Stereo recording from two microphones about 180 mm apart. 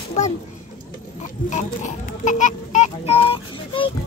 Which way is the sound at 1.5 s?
45° left (ahead or behind).